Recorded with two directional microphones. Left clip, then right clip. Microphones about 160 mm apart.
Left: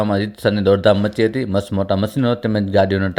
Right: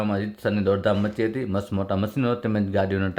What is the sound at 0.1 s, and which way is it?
Speech, 30° left (ahead or behind).